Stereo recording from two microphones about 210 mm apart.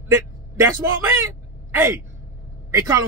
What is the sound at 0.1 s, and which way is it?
A man's voice, 15° right (ahead or behind).